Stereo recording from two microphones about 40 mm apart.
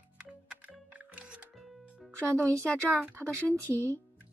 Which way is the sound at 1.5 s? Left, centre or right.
Centre.